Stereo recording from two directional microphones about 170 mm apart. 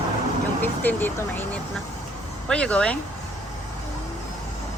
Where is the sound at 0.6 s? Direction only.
10° left (ahead or behind).